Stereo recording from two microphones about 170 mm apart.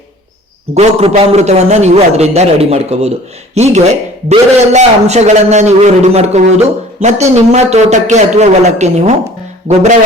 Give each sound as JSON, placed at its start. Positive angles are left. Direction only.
{"t": 0.7, "sound": "a man's voice", "side_deg": -40}